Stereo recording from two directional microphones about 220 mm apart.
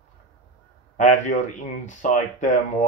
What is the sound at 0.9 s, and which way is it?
Speech, 35° left (ahead or behind).